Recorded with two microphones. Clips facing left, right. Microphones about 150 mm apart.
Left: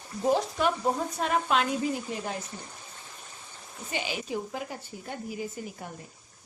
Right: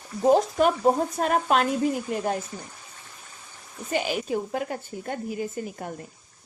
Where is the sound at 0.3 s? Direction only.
45° right (ahead or behind).